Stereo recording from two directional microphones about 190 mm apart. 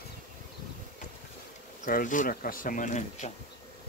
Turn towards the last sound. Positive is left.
turn(degrees=40)  # may be behind; listen again after turning